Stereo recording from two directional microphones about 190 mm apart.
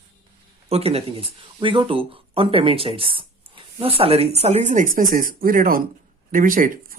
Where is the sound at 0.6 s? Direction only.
30° right (ahead or behind).